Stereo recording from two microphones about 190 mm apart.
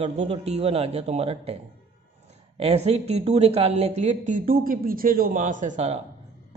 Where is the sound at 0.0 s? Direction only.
35° right (ahead or behind).